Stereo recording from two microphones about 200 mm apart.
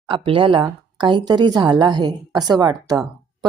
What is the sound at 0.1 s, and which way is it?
A woman's voice, 25° right (ahead or behind).